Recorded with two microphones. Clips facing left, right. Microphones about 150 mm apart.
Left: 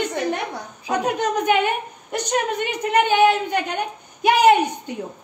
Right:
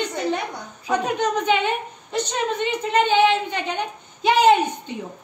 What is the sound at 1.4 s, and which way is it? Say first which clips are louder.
A woman's voice: left 2 dB; 10° left (ahead or behind).